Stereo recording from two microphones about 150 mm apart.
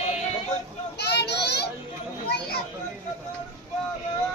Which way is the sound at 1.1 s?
90° left.